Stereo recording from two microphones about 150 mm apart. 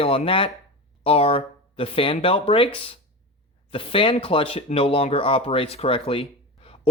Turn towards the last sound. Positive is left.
turn(degrees=40)  # may be behind; listen again after turning